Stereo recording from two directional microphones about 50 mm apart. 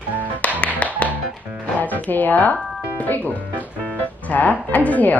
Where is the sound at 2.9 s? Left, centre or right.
Left.